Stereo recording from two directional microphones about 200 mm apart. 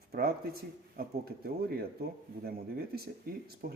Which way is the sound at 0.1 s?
50° right (ahead or behind).